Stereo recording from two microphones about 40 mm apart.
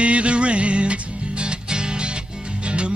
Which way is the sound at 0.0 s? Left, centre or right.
Right.